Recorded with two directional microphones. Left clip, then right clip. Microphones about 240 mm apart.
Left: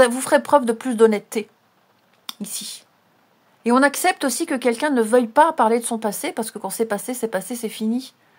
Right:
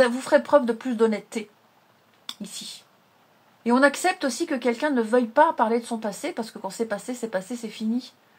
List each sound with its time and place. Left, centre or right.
0.0 s a woman's voice: left